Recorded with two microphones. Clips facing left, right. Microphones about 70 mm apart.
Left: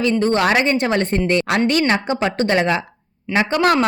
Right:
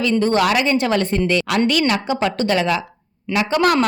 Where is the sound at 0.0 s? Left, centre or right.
Left.